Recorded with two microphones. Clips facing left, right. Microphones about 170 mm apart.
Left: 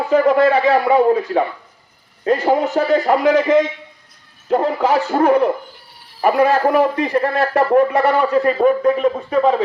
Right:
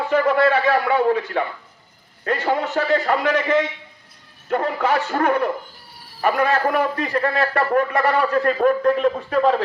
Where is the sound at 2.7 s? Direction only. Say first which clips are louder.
Left 4 dB; 15° left (ahead or behind).